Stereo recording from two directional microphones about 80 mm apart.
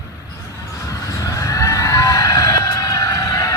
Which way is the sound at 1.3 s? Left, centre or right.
Left.